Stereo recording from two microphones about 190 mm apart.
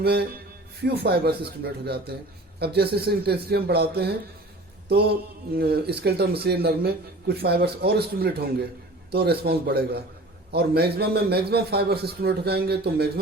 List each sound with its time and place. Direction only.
0.0 s a man's voice: 60° right (ahead or behind)